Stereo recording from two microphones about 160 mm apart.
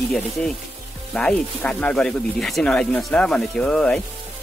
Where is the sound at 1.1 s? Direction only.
5° left (ahead or behind).